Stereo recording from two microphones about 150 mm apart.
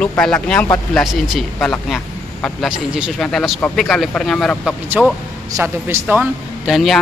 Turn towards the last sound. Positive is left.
turn(degrees=0)  # may be behind; listen again after turning